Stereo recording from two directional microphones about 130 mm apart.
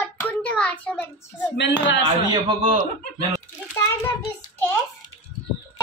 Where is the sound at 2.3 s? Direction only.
35° right (ahead or behind).